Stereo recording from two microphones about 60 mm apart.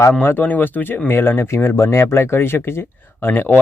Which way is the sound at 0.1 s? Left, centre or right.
Left.